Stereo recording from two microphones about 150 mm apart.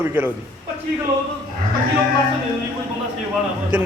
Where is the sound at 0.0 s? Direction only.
15° right (ahead or behind).